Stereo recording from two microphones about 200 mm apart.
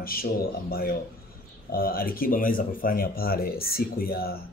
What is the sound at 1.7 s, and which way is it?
A man's voice, 45° left (ahead or behind).